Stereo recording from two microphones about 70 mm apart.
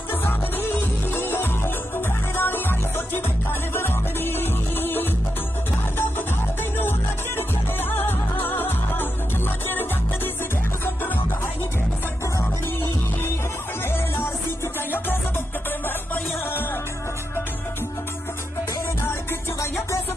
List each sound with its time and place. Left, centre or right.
0.2 s music: left
3.7 s music: left
7.9 s music: left